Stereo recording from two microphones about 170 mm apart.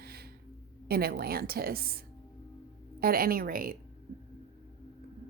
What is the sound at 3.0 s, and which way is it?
Speech, 60° right (ahead or behind).